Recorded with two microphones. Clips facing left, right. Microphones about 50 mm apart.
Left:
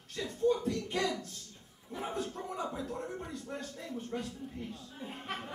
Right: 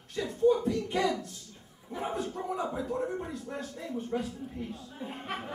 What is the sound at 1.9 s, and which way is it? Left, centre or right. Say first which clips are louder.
Speech: right 4 dB; centre.